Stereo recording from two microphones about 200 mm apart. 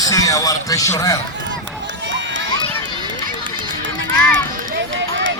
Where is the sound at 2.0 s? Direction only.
65° right (ahead or behind).